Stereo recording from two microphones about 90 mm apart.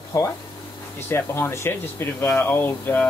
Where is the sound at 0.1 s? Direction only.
35° left (ahead or behind).